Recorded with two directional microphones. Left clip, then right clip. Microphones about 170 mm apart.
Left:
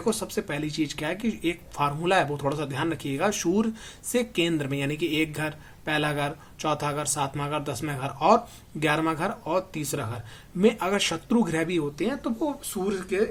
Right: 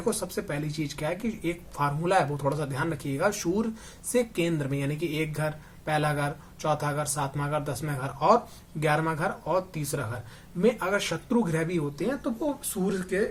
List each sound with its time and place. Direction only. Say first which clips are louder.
0.0 s speech: left 2 dB; 30° left (ahead or behind)